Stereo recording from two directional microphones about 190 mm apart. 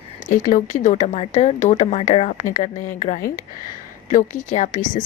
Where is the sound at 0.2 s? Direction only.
45° left (ahead or behind).